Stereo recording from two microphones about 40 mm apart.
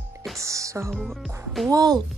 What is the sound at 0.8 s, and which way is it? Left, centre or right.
Speech, right.